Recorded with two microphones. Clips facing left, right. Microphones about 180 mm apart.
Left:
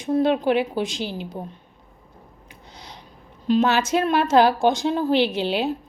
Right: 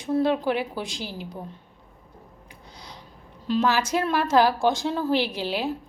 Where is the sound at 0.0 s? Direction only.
20° left (ahead or behind).